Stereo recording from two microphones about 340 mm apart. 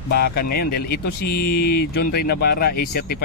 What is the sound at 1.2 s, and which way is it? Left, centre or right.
Speech, left.